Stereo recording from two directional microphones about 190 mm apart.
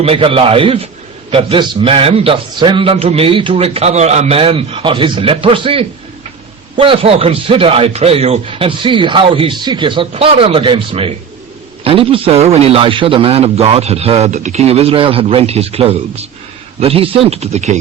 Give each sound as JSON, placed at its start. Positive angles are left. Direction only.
{"t": 0.0, "sound": "a man's voice", "side_deg": -30}